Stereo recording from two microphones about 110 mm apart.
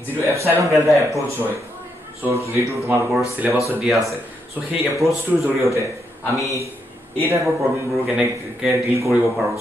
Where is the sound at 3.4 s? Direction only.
15° right (ahead or behind).